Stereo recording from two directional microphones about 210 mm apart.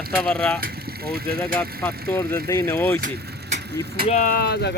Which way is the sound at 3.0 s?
40° right (ahead or behind).